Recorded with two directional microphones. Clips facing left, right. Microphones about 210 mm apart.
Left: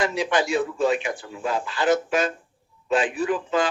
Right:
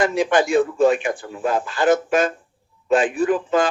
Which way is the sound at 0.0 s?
50° right (ahead or behind).